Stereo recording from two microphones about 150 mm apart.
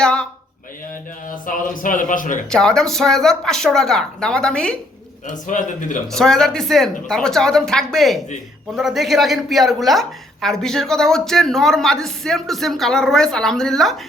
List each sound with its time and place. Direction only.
0.0 s speech: 5° left (ahead or behind)
1.5 s a man's voice: 65° left (ahead or behind)
2.5 s a woman's voice: 5° left (ahead or behind)
5.5 s a man's voice: 60° left (ahead or behind)
6.1 s a woman's voice: 5° left (ahead or behind)